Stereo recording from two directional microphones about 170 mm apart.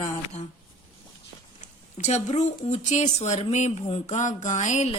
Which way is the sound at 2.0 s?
40° left (ahead or behind).